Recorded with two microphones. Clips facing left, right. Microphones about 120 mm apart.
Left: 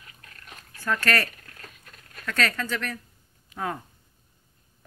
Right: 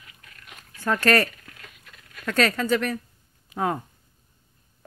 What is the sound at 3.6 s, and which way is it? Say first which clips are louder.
Speech: right 5 dB; 40° right (ahead or behind).